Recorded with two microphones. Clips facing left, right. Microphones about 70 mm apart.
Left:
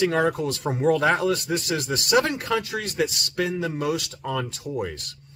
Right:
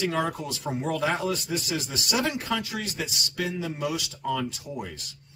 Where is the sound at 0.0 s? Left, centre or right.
Left.